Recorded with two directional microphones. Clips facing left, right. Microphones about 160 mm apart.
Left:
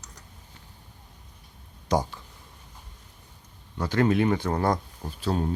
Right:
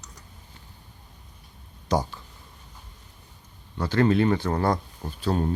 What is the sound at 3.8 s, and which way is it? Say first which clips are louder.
Speech: right 2 dB; 15° left (ahead or behind).